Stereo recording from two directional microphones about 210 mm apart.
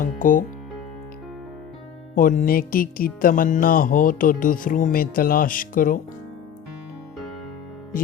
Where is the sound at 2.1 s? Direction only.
40° left (ahead or behind).